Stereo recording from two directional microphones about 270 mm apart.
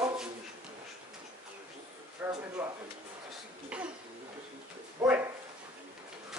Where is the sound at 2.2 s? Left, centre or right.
Centre.